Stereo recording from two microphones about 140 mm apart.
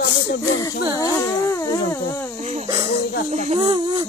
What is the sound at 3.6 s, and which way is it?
Speech, 30° right (ahead or behind).